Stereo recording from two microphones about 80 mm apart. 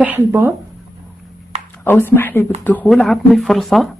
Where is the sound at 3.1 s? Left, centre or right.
Centre.